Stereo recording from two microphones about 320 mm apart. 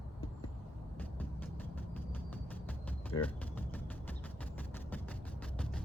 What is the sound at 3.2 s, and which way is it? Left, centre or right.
Music, centre.